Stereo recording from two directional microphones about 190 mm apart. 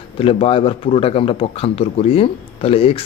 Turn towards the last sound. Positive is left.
turn(degrees=30)  # may be behind; listen again after turning